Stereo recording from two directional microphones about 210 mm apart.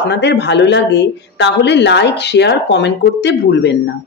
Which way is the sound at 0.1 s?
55° left (ahead or behind).